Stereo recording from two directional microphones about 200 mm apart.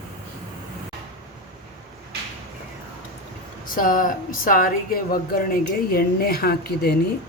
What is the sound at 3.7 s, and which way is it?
Speech, 45° left (ahead or behind).